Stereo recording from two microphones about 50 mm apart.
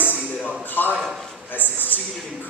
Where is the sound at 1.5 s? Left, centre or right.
Left.